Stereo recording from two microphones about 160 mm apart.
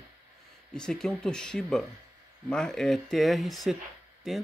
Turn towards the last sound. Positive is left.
turn(degrees=0)  # may be behind; listen again after turning